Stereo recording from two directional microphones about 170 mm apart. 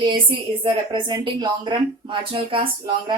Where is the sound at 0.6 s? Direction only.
30° right (ahead or behind).